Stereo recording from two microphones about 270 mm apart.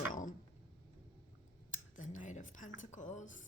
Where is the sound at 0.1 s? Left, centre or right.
Left.